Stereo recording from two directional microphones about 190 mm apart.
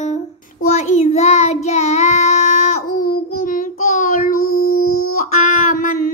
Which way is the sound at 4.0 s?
45° left (ahead or behind).